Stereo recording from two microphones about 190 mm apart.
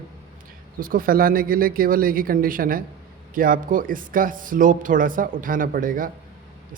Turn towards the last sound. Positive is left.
turn(degrees=-45)  # may be behind; listen again after turning